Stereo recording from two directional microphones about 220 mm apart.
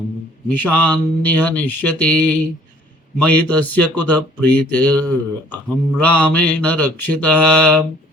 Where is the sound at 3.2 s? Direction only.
5° left (ahead or behind).